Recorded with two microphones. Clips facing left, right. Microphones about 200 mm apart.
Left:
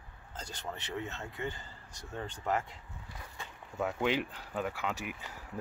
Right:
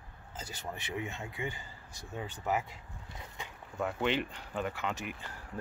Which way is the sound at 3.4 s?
15° right (ahead or behind).